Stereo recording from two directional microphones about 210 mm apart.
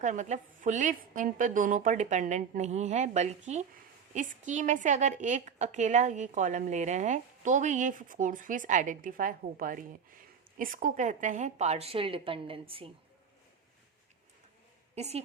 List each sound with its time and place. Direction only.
0.0 s a woman's voice: 35° right (ahead or behind)
14.9 s a woman's voice: 30° right (ahead or behind)